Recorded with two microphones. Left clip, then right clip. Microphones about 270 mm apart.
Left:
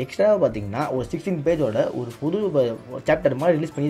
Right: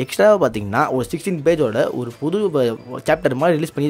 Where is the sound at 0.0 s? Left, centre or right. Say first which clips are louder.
Right 5 dB; right.